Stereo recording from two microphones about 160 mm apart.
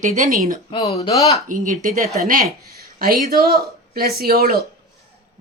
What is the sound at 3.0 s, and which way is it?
A woman's voice, 70° right (ahead or behind).